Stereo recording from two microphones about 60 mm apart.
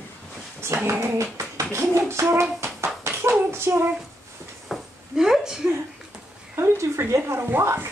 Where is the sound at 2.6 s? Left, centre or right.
Right.